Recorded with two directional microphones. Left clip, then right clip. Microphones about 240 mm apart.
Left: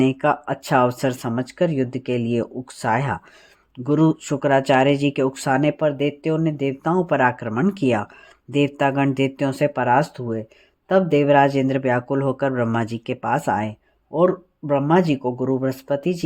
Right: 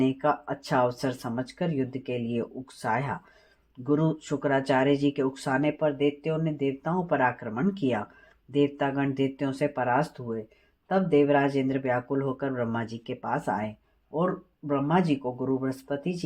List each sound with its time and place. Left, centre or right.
0.0 s speech: left